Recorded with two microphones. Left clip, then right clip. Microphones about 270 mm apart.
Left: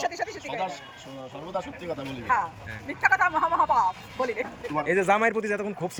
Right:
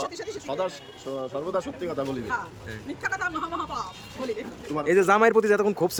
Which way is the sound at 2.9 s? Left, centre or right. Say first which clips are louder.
Left 7 dB; centre.